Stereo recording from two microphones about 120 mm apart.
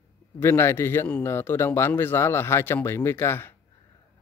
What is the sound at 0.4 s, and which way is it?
Speech, 20° left (ahead or behind).